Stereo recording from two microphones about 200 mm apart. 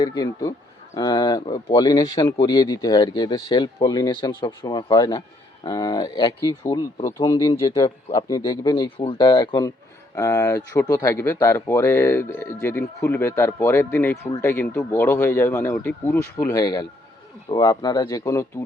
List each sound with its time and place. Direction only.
0.0 s speech: 20° left (ahead or behind)
7.7 s speech: 30° left (ahead or behind)
8.1 s speech: 20° left (ahead or behind)